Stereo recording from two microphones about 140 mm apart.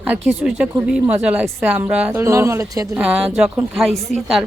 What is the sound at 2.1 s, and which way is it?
Speech, 20° right (ahead or behind).